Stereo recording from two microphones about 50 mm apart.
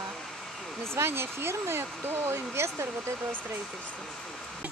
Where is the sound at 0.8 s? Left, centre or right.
Right.